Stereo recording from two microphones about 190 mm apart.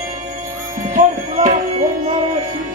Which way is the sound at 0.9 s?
40° right (ahead or behind).